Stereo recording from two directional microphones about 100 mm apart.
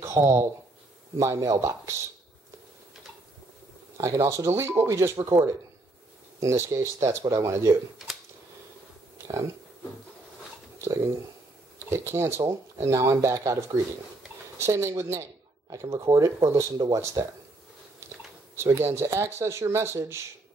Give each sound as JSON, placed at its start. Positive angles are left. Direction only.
{"t": 0.2, "sound": "speech", "side_deg": -30}
{"t": 4.0, "sound": "speech", "side_deg": -30}
{"t": 9.2, "sound": "a sound", "side_deg": -25}
{"t": 10.8, "sound": "speech", "side_deg": -25}
{"t": 18.0, "sound": "drip", "side_deg": -25}
{"t": 18.6, "sound": "speech", "side_deg": -25}